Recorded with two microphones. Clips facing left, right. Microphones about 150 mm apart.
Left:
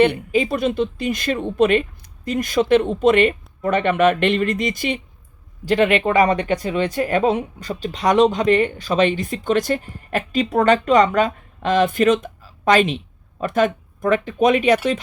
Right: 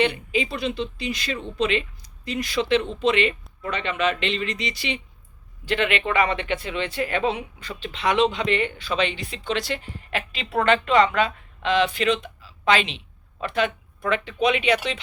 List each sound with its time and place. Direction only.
0.0 s speech: 45° left (ahead or behind)